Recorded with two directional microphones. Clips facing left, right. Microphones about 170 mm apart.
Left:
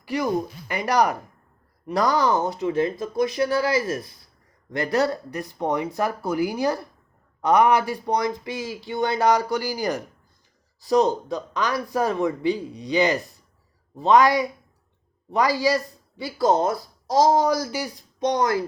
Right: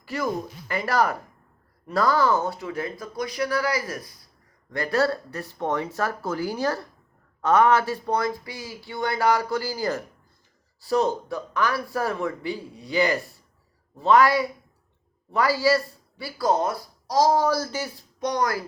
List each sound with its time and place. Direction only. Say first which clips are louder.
0.0 s speech: left 4 dB; 15° left (ahead or behind)